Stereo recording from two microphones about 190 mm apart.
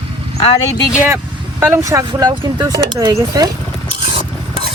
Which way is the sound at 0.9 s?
5° right (ahead or behind).